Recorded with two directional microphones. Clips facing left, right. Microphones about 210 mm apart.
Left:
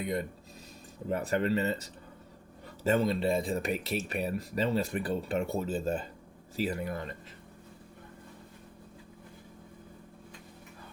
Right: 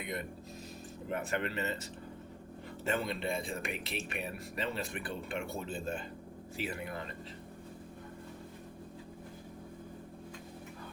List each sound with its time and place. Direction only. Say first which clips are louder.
0.0 s speech: left 6 dB; 35° left (ahead or behind)